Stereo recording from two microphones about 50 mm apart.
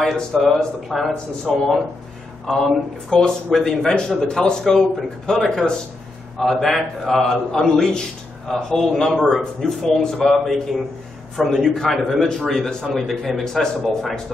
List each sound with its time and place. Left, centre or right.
0.0 s a man's voice: centre
4.2 s a man's voice: centre